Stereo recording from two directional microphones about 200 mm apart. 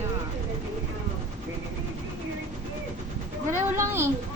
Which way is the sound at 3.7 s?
15° right (ahead or behind).